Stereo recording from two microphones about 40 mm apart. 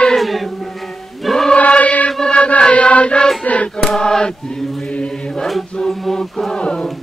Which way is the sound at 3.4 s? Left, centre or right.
Left.